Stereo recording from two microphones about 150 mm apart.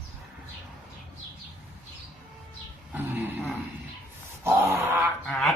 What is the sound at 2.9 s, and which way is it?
Dog, 15° right (ahead or behind).